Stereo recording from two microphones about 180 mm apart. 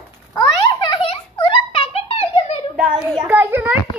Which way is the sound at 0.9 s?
30° left (ahead or behind).